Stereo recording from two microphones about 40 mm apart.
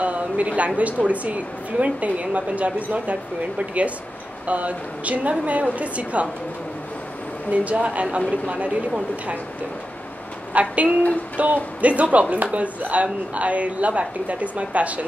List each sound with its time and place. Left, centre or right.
0.0 s a sound: right
0.7 s a woman's voice: right
7.5 s a woman's voice: right
10.5 s a woman's voice: right